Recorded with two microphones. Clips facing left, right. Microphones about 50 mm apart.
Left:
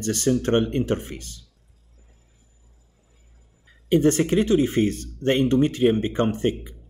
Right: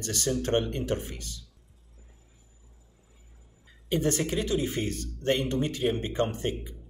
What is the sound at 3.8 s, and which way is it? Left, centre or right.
A man's voice, left.